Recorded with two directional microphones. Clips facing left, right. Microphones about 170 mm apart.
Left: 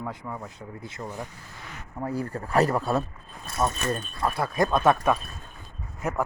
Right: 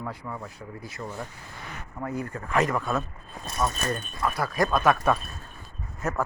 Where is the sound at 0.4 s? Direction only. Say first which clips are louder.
Even; 25° left (ahead or behind).